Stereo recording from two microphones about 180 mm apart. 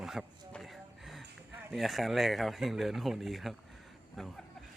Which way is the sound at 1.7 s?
Centre (ahead or behind).